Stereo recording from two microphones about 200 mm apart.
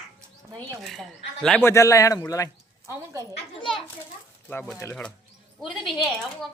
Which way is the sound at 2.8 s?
15° right (ahead or behind).